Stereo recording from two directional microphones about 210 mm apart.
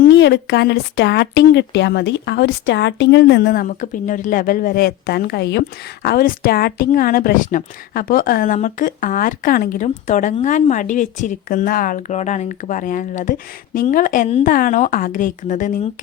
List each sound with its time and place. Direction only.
0.1 s a woman's voice: 55° left (ahead or behind); by 15.9 s 35° left (ahead or behind)